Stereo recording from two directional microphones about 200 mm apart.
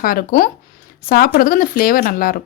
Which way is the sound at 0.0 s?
45° left (ahead or behind).